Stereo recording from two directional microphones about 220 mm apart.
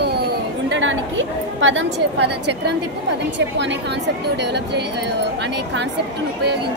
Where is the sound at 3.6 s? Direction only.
50° right (ahead or behind).